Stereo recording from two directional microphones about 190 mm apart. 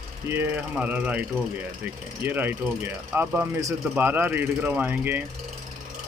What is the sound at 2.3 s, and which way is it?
Speech, 10° right (ahead or behind).